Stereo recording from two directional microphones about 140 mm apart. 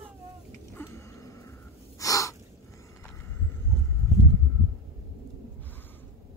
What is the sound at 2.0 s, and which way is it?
Gasp, 25° left (ahead or behind).